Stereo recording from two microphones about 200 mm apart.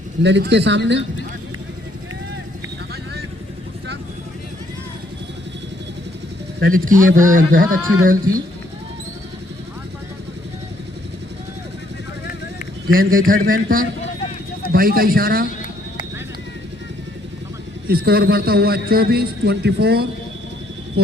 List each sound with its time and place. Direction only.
0.2 s speech: 60° right (ahead or behind)
6.7 s a man's voice: 45° right (ahead or behind)
12.9 s a man's voice: 45° right (ahead or behind)
17.8 s a man's voice: 50° right (ahead or behind)